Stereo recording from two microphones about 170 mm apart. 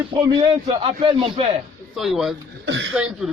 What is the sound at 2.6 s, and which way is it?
Speech, 90° right.